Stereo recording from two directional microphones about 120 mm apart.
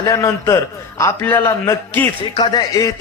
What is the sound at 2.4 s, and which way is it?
Speech, 35° left (ahead or behind).